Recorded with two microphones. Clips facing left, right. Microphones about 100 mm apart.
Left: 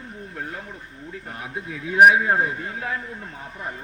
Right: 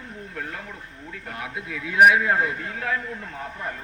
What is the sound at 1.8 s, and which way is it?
A man's voice, 30° left (ahead or behind).